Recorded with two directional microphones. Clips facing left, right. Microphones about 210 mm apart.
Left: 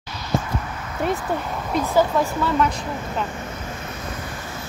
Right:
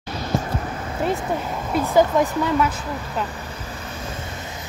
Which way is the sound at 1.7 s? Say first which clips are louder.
Right 2 dB; 15° right (ahead or behind).